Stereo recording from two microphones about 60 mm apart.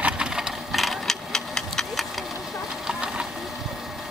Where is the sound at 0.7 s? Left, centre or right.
Centre.